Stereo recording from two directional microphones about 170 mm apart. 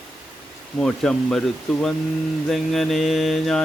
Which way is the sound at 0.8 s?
5° left (ahead or behind).